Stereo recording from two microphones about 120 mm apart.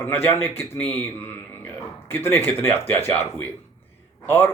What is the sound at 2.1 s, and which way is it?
Speech, 20° left (ahead or behind).